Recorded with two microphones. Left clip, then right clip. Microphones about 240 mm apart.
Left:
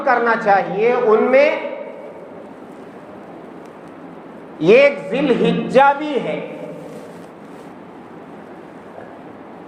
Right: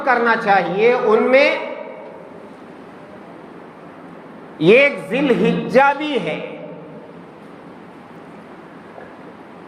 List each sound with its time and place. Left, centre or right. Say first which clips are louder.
0.0 s a man's voice: even; right
4.6 s a man's voice: left 1 dB; right